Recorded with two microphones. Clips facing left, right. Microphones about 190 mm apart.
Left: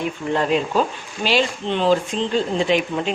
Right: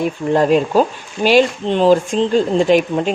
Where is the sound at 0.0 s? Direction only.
45° right (ahead or behind).